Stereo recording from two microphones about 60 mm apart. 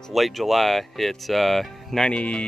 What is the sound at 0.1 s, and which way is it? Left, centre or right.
Speech, centre.